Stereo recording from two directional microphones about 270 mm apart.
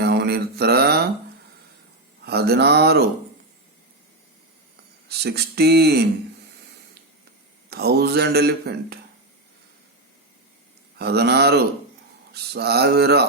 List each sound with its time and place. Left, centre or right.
0.0 s mantra: right
2.2 s speech: right
5.0 s speech: right
7.7 s speech: right
10.9 s speech: right